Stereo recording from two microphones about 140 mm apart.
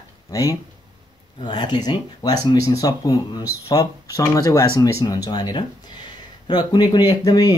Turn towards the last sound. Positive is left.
turn(degrees=30)  # may be behind; listen again after turning